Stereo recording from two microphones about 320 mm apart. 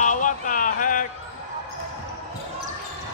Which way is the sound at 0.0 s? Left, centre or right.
Left.